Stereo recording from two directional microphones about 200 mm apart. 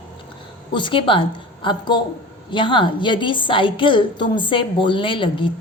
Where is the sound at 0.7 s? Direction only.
25° left (ahead or behind).